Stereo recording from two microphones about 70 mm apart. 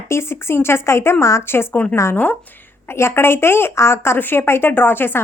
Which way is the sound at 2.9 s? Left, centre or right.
Left.